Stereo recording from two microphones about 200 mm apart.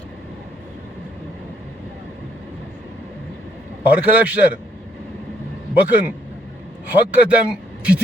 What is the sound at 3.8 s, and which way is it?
Speech, 10° right (ahead or behind).